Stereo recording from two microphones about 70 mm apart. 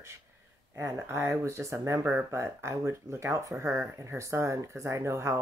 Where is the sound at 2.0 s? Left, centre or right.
Right.